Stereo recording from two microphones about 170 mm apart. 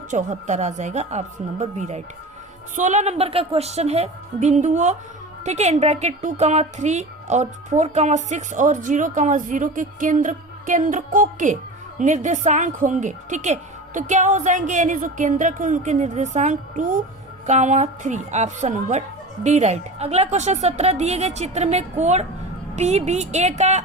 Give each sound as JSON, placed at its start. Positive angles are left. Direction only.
{"t": 0.1, "sound": "a woman's voice", "side_deg": -45}